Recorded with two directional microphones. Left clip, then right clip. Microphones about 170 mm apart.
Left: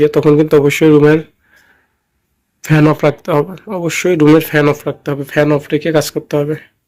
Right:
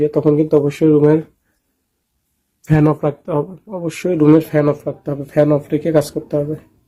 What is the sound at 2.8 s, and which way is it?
Speech, 5° left (ahead or behind).